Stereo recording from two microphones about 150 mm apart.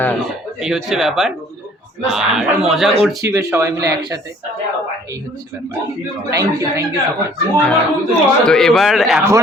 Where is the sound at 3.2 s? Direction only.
20° right (ahead or behind).